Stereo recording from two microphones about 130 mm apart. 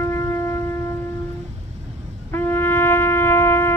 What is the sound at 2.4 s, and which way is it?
Wind instrument, 15° left (ahead or behind).